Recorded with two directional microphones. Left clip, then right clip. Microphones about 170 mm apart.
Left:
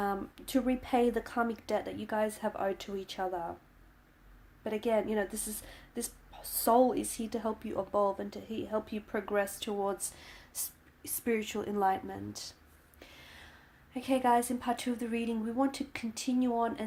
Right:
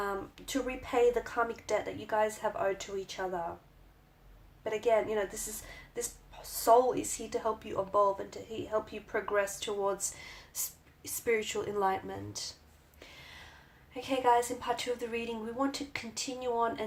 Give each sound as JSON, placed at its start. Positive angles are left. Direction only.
{"t": 0.0, "sound": "a woman's voice", "side_deg": 40}
{"t": 4.6, "sound": "a woman's voice", "side_deg": 45}
{"t": 13.0, "sound": "a sound", "side_deg": 40}
{"t": 13.9, "sound": "a woman's voice", "side_deg": 40}